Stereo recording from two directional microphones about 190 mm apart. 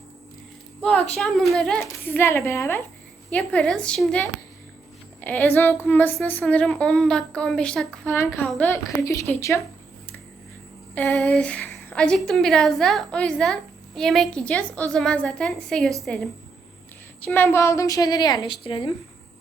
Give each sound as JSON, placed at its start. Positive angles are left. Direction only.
{"t": 0.8, "sound": "a woman's voice", "side_deg": 5}
{"t": 5.2, "sound": "child singing", "side_deg": 10}
{"t": 10.9, "sound": "a woman's voice", "side_deg": 10}